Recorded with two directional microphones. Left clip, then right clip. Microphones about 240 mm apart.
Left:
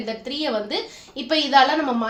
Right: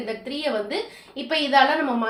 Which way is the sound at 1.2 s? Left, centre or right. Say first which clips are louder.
Left 2 dB; left.